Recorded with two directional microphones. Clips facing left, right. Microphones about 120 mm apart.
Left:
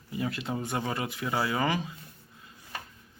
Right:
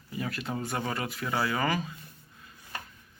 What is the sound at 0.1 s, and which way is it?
Speech, 20° left (ahead or behind).